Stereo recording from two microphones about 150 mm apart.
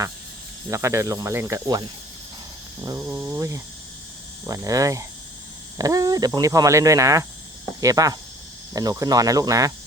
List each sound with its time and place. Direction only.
0.7 s speech: 20° right (ahead or behind)
2.8 s speech: 20° right (ahead or behind)